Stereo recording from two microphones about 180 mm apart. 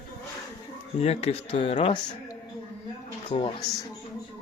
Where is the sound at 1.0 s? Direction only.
35° left (ahead or behind).